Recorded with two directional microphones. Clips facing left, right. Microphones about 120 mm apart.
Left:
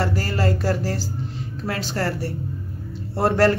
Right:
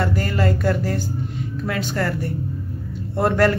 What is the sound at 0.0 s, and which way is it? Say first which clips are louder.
Speech: right 1 dB; 30° left (ahead or behind).